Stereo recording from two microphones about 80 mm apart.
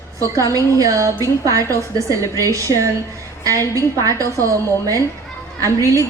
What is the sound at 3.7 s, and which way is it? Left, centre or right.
A woman's voice, right.